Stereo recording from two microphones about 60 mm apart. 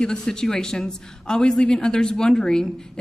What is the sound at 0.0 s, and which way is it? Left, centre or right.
A man's voice, centre.